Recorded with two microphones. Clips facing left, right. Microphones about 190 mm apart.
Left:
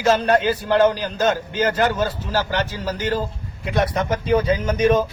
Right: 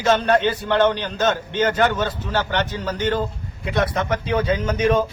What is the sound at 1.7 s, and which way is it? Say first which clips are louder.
Speech: even; 35° left (ahead or behind).